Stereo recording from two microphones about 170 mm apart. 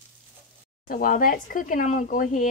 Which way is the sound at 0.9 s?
55° left (ahead or behind).